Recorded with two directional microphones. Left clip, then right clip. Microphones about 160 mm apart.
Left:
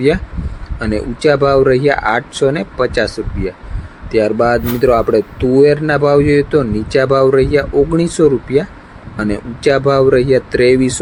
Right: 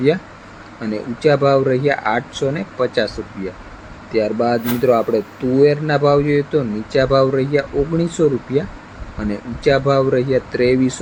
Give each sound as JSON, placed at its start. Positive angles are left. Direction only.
{"t": 0.8, "sound": "speech", "side_deg": 55}